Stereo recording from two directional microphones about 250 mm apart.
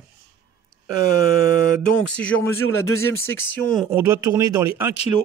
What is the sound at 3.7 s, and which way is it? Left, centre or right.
A man's voice, centre.